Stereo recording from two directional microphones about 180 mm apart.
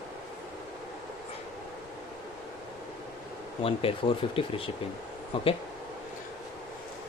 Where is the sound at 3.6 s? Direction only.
30° left (ahead or behind).